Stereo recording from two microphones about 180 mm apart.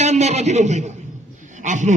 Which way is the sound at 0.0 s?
40° right (ahead or behind).